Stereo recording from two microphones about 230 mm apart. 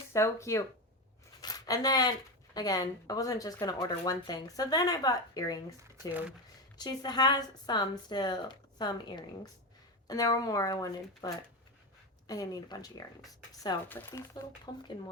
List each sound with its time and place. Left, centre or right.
0.1 s speech: centre
1.4 s a sound: centre
2.6 s speech: centre
6.1 s speech: centre
6.7 s speech: centre